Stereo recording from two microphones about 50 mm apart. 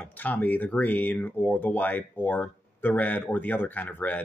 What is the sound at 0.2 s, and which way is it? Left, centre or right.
Speech, left.